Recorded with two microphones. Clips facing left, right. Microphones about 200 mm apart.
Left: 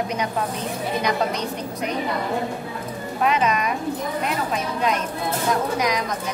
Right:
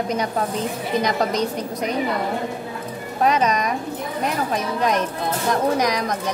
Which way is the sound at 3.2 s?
40° right (ahead or behind).